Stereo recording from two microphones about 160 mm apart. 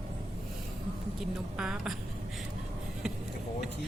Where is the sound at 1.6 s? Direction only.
5° right (ahead or behind).